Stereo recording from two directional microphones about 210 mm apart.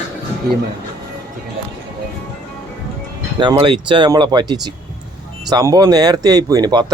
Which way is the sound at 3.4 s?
20° right (ahead or behind).